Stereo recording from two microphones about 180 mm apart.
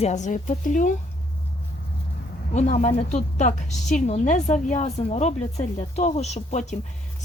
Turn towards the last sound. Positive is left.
turn(degrees=40)  # may be behind; listen again after turning